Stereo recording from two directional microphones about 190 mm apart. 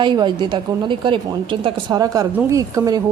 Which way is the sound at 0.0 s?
25° right (ahead or behind).